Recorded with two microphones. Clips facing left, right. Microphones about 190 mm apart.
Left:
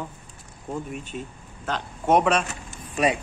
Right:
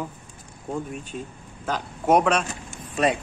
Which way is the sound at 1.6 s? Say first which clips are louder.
Right 2 dB; centre (ahead or behind).